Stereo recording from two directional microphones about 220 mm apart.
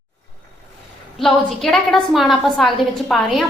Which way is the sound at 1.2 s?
Centre (ahead or behind).